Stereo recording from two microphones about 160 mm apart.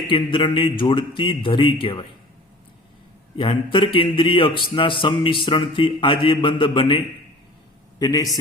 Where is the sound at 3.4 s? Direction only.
30° left (ahead or behind).